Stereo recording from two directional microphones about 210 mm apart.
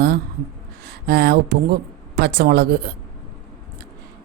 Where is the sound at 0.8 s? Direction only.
50° right (ahead or behind).